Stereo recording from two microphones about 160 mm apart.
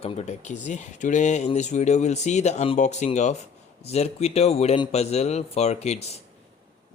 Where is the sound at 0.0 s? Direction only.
45° left (ahead or behind).